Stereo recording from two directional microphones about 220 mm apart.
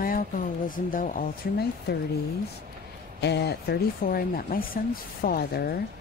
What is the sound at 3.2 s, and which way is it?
Speech, 50° left (ahead or behind).